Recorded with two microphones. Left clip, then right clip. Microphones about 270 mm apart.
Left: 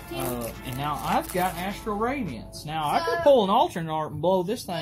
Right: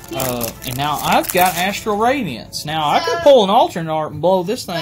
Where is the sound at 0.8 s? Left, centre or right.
Right.